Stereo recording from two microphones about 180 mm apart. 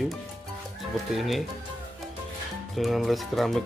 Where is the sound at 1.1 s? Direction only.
Centre (ahead or behind).